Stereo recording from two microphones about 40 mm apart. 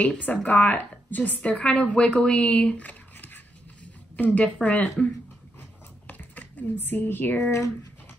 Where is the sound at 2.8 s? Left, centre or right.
Left.